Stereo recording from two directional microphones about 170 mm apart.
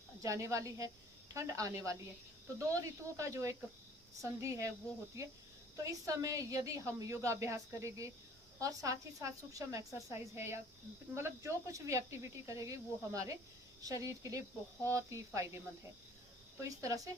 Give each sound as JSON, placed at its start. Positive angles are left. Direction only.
{"t": 0.2, "sound": "a woman's voice", "side_deg": -20}